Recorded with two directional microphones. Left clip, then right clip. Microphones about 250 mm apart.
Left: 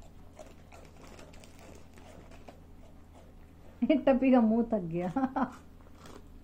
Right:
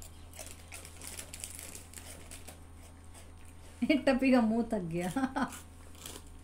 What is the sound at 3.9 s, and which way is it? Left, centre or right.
A woman's voice, right.